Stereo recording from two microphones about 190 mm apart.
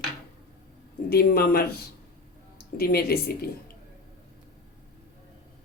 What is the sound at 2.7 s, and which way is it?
Speech, 55° left (ahead or behind).